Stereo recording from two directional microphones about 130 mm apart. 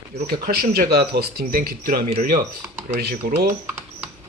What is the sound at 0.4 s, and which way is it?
Speech, 90° right.